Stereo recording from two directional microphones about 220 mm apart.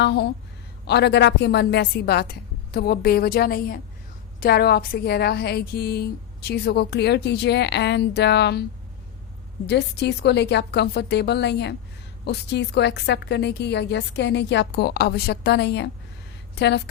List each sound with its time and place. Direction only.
0.0 s a woman's voice: 50° left (ahead or behind)
9.6 s a woman's voice: 50° left (ahead or behind)